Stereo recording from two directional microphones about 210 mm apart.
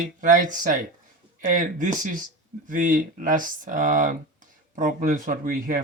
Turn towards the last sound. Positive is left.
turn(degrees=-40)  # may be behind; listen again after turning